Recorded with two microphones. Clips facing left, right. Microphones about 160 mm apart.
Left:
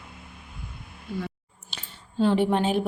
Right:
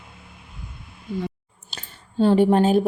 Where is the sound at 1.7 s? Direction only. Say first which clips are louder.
Right 4 dB; 35° right (ahead or behind).